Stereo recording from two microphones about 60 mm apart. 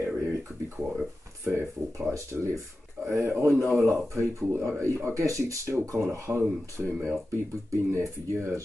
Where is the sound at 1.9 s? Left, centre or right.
Right.